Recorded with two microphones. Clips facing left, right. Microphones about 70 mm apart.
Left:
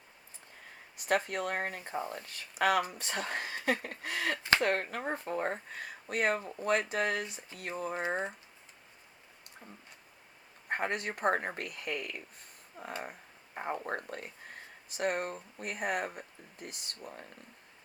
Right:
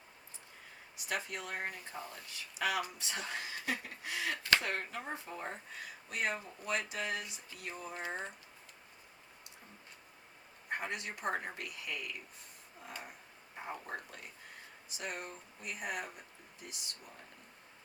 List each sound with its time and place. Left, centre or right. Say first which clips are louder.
0.9 s speech: left 9 dB; left
2.0 s speech: left 8 dB; left
2.2 s speech: left 6 dB; left
8.0 s speech: left 6 dB; left
10.7 s speech: left 6 dB; left